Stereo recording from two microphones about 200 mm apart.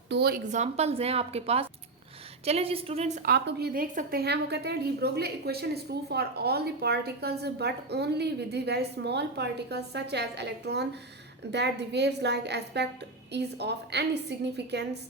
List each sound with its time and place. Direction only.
0.1 s a woman's voice: 50° right (ahead or behind); by 3.1 s 30° right (ahead or behind)
3.2 s a woman's voice: 55° right (ahead or behind)